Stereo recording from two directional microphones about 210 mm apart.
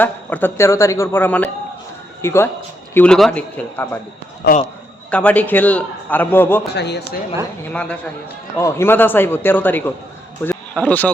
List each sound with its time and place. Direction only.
0.0 s a man's voice: 10° left (ahead or behind)
4.4 s speech: 50° left (ahead or behind)
5.1 s a man's voice: 5° left (ahead or behind)
6.7 s speech: 55° left (ahead or behind)
7.7 s a man's voice: 5° left (ahead or behind)